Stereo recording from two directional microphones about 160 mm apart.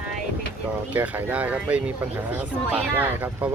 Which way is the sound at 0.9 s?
10° right (ahead or behind).